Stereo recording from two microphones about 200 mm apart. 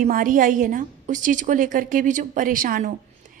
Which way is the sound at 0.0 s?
45° right (ahead or behind).